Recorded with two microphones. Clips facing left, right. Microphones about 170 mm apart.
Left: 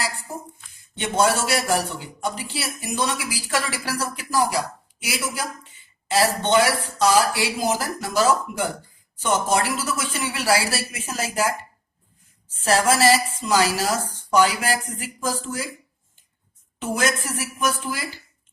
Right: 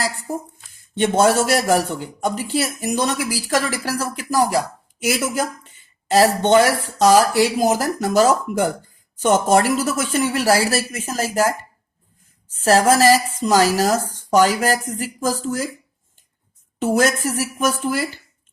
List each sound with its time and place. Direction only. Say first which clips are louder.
0.9 s a man's voice: right 5 dB; 50° right (ahead or behind)
12.5 s a man's voice: right 5 dB; 40° right (ahead or behind)
16.8 s a man's voice: right 6 dB; 45° right (ahead or behind)